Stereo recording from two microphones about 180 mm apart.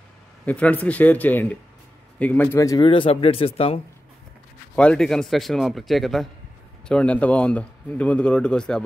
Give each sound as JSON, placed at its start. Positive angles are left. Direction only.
{"t": 0.5, "sound": "speech", "side_deg": 10}
{"t": 4.7, "sound": "speech", "side_deg": 5}